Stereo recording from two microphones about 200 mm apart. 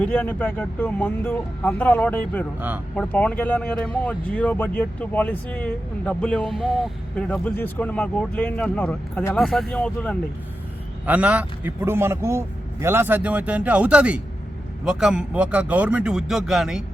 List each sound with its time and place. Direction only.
0.0 s speech: 10° left (ahead or behind)
2.6 s a man's voice: 10° right (ahead or behind)
2.9 s speech: 5° left (ahead or behind)
11.0 s a man's voice: 5° right (ahead or behind)